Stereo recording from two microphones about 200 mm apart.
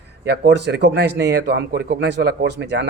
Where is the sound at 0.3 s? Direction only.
60° right (ahead or behind).